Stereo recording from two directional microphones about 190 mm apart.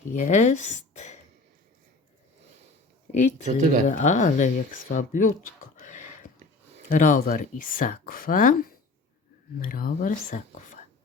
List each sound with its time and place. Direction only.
0.1 s speech: 40° left (ahead or behind)
3.1 s speech: 35° left (ahead or behind)
3.4 s speech: 40° right (ahead or behind)
3.8 s speech: 40° left (ahead or behind)
9.6 s speech: 45° left (ahead or behind)